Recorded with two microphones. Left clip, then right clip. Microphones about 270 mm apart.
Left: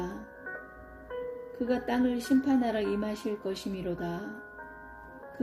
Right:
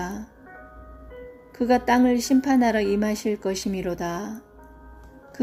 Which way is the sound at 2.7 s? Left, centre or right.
Right.